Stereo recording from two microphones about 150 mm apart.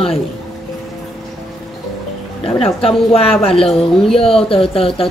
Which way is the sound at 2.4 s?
40° left (ahead or behind).